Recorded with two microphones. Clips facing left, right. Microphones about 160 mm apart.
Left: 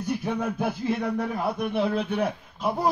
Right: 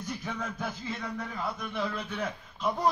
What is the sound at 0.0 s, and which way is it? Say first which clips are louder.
Speech: left 9 dB; 60° left (ahead or behind).